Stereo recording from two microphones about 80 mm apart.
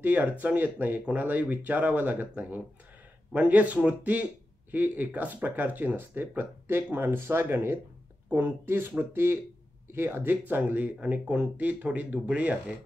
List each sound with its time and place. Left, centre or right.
0.0 s a man's voice: right